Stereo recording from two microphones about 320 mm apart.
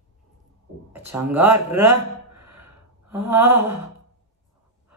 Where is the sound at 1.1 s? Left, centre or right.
Centre.